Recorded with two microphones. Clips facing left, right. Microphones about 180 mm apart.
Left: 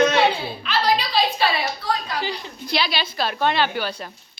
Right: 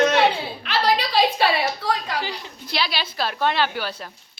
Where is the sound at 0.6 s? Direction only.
65° right (ahead or behind).